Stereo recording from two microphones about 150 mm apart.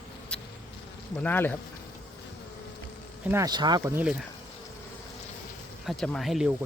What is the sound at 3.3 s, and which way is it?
Speech, 25° right (ahead or behind).